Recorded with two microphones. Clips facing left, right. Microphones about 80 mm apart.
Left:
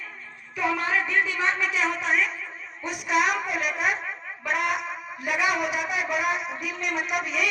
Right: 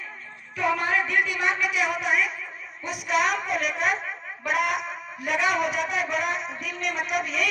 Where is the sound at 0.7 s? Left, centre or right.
Centre.